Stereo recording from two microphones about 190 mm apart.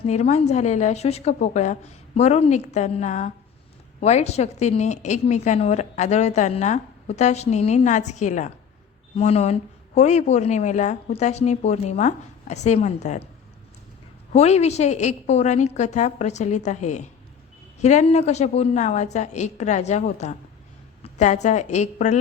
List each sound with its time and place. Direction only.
0.0 s a woman's voice: 35° left (ahead or behind)
14.3 s a woman's voice: 35° left (ahead or behind)